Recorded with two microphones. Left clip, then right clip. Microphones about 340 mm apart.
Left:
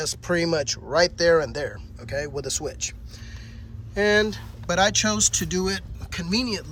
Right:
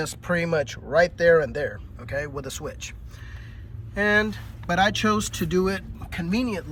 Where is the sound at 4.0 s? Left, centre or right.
Centre.